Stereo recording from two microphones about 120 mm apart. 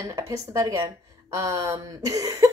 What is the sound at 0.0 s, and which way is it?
Speech, 25° right (ahead or behind).